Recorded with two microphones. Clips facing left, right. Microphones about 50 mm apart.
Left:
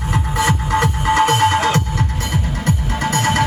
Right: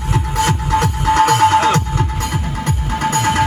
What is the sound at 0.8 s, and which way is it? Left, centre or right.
Music, right.